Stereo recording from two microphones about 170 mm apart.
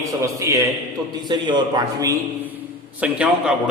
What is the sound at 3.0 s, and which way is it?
Speech, 5° right (ahead or behind).